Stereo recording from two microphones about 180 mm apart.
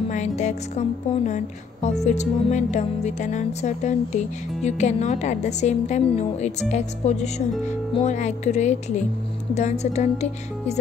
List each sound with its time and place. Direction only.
0.1 s speech: 40° left (ahead or behind)